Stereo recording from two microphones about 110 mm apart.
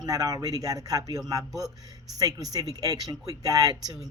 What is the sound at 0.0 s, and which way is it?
Speech, 35° right (ahead or behind).